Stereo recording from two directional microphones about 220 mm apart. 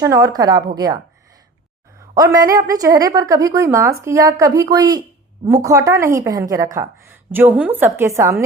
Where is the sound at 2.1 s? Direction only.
15° right (ahead or behind).